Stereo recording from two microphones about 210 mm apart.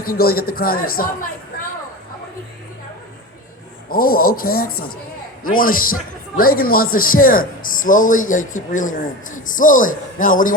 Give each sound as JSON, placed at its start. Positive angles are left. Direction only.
{"t": 0.1, "sound": "a man's voice", "side_deg": 45}
{"t": 3.8, "sound": "a man's voice", "side_deg": 45}